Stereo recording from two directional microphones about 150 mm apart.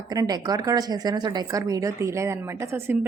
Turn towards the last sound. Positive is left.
turn(degrees=-15)  # may be behind; listen again after turning